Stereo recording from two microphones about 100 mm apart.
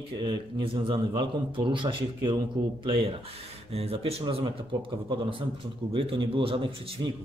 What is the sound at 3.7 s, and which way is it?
A man's voice, 75° right (ahead or behind).